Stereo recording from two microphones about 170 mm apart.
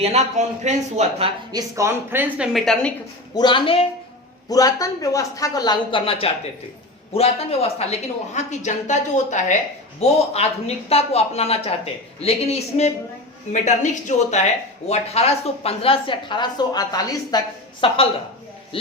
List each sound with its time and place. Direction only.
0.0 s speech: 40° right (ahead or behind)
1.5 s a woman's voice: 15° right (ahead or behind); by 2.9 s centre (ahead or behind)
3.3 s a woman's voice: 25° left (ahead or behind)